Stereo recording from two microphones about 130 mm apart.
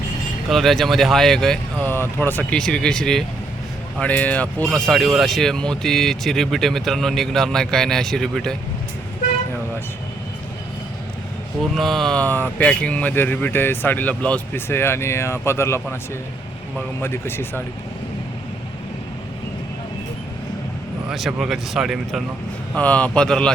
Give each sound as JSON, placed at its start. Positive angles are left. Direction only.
{"t": 0.5, "sound": "speech", "side_deg": 0}
{"t": 1.9, "sound": "speech", "side_deg": 15}
{"t": 11.7, "sound": "speech", "side_deg": 0}
{"t": 17.0, "sound": "speech", "side_deg": 15}
{"t": 21.1, "sound": "speech", "side_deg": -5}
{"t": 22.7, "sound": "speech", "side_deg": 10}